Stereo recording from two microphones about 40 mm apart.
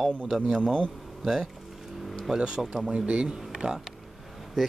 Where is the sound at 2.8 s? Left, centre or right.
Right.